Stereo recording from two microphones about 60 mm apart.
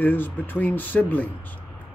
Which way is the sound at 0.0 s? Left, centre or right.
Left.